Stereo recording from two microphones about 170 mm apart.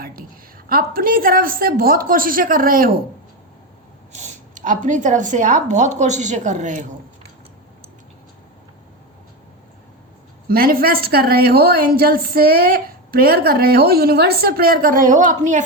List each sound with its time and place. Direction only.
0.7 s a woman's voice: 60° right (ahead or behind)
4.1 s a woman's voice: 45° right (ahead or behind)
10.5 s a woman's voice: 60° right (ahead or behind)